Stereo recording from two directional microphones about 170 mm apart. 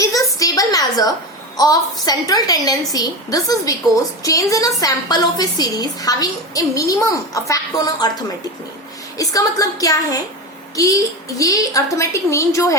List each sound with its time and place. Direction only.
0.0 s a sound: 20° left (ahead or behind)
1.5 s a woman's voice: 20° left (ahead or behind)
9.1 s a woman's voice: 20° left (ahead or behind)